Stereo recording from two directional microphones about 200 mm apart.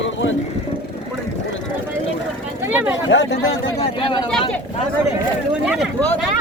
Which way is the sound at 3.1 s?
70° left (ahead or behind).